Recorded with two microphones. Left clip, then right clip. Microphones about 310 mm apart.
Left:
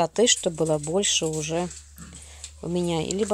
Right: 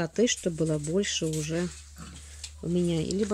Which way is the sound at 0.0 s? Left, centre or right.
Centre.